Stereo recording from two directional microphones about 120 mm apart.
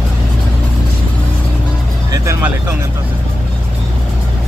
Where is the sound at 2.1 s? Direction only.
25° right (ahead or behind).